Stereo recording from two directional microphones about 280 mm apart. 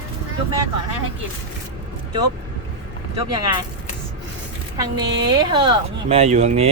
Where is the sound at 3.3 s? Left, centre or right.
Centre.